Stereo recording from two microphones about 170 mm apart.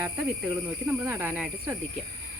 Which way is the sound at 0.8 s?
10° right (ahead or behind).